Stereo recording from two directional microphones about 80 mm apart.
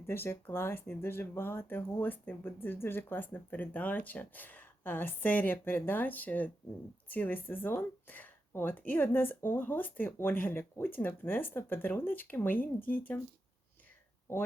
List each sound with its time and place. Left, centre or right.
0.1 s speech: left